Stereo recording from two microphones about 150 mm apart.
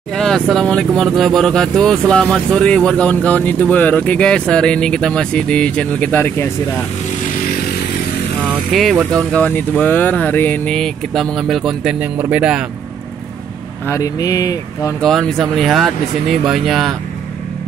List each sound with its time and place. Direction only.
0.1 s speech: 5° left (ahead or behind)
8.7 s speech: centre (ahead or behind)
13.8 s speech: 20° left (ahead or behind)
15.0 s speech: 5° left (ahead or behind)